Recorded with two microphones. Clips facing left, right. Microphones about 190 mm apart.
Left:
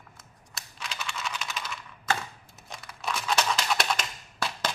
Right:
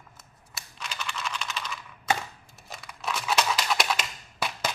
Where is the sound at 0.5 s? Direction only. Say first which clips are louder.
Right 1 dB; centre (ahead or behind).